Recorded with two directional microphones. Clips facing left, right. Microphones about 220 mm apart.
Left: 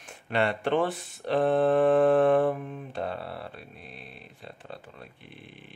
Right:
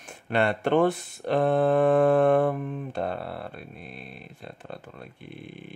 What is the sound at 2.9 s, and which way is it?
Speech, 55° right (ahead or behind).